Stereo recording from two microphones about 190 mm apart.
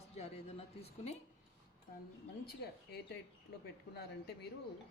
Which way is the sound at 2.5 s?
60° left (ahead or behind).